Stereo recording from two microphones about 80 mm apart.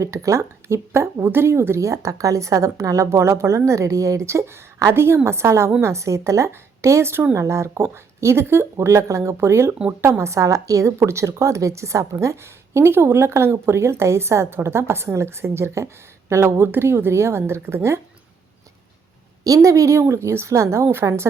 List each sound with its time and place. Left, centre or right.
0.0 s a woman's voice: right
19.5 s a woman's voice: right